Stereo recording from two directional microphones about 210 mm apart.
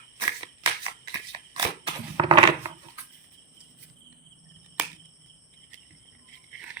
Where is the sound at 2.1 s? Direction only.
20° right (ahead or behind).